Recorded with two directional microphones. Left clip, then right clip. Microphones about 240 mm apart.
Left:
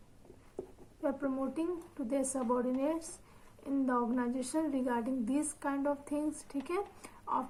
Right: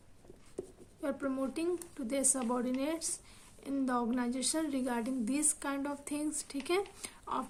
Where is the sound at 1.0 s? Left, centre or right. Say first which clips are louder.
Left 1 dB; right.